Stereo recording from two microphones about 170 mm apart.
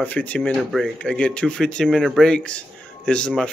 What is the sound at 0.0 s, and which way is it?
Speech, 10° left (ahead or behind).